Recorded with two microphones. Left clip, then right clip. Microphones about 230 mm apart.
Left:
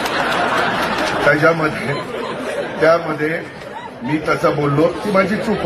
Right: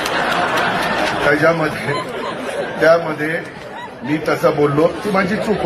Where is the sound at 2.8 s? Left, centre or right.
Right.